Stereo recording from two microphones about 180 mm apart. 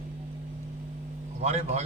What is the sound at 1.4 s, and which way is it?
Speech, 35° right (ahead or behind).